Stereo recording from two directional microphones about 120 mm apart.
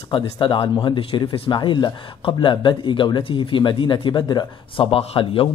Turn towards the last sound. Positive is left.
turn(degrees=45)  # may be behind; listen again after turning